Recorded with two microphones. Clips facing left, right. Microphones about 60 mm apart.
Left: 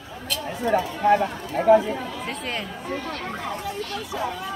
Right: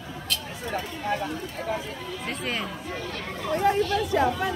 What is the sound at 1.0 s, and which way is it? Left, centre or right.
Speech, left.